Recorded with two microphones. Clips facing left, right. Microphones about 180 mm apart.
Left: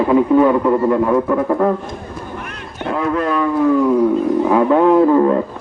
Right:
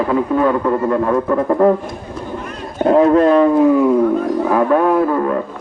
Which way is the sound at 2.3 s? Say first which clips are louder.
Right 6 dB; 70° left (ahead or behind).